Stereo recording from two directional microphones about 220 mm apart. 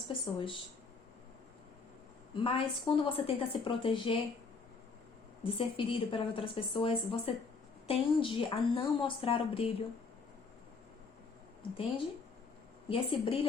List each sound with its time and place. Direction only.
0.1 s a woman's voice: 25° left (ahead or behind)
2.3 s a woman's voice: 25° left (ahead or behind)
5.4 s a woman's voice: 25° left (ahead or behind)
12.9 s a woman's voice: 25° left (ahead or behind)